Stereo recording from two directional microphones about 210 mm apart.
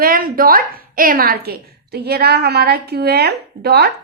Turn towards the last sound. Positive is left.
turn(degrees=-50)  # may be behind; listen again after turning